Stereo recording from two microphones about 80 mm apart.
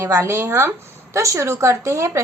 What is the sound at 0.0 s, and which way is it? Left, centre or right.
A woman's voice, right.